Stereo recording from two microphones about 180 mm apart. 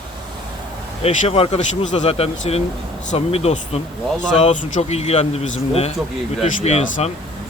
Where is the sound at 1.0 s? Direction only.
35° left (ahead or behind).